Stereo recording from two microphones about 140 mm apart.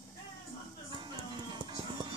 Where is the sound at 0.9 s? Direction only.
35° right (ahead or behind).